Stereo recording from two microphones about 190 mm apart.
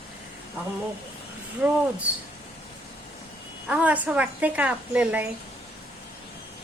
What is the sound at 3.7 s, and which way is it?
Speech, 5° right (ahead or behind).